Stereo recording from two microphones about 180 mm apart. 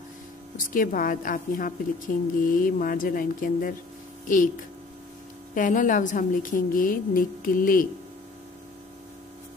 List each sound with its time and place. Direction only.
0.6 s a woman's voice: 50° left (ahead or behind)
5.5 s a woman's voice: 45° left (ahead or behind)